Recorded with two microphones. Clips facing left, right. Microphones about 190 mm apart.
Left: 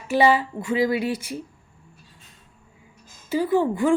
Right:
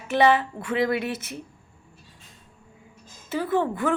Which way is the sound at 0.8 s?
60° right (ahead or behind).